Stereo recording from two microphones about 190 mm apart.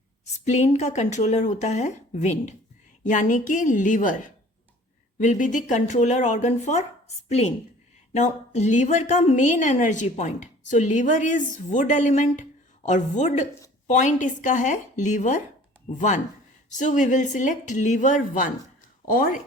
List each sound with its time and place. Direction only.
0.4 s a woman's voice: 35° left (ahead or behind)